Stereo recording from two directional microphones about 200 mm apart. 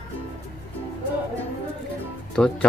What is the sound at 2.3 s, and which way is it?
Speech, 5° left (ahead or behind).